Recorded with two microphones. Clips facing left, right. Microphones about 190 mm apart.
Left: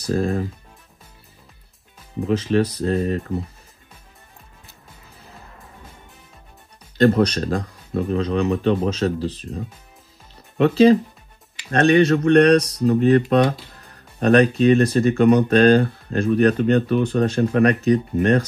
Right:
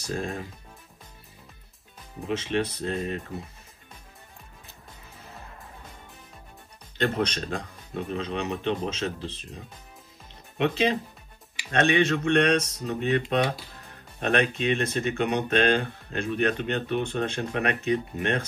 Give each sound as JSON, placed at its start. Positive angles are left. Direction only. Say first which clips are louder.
{"t": 0.0, "sound": "speech", "louder": "left 10 dB", "side_deg": 40}
{"t": 2.2, "sound": "speech", "louder": "left 8 dB", "side_deg": 35}
{"t": 7.0, "sound": "speech", "louder": "left 10 dB", "side_deg": 35}
{"t": 10.6, "sound": "speech", "louder": "left 11 dB", "side_deg": 35}
{"t": 14.2, "sound": "speech", "louder": "left 10 dB", "side_deg": 40}